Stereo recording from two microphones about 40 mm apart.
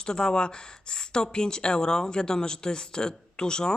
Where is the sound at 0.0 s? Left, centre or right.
Centre.